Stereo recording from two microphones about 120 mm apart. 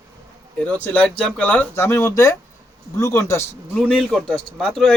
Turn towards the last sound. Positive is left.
turn(degrees=5)  # may be behind; listen again after turning